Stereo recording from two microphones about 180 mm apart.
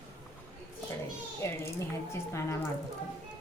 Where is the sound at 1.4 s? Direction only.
15° left (ahead or behind).